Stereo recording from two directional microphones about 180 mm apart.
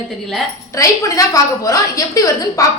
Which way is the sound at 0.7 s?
20° left (ahead or behind).